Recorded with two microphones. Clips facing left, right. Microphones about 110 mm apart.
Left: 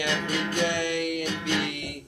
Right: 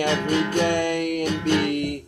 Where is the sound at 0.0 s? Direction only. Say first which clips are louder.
Right 7 dB; 45° right (ahead or behind).